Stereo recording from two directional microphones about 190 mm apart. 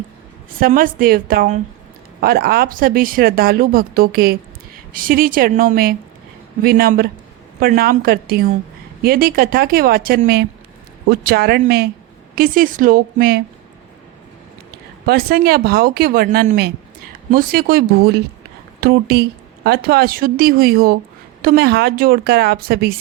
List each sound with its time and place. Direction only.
0.6 s speech: 45° right (ahead or behind)
15.0 s a woman's voice: 55° right (ahead or behind)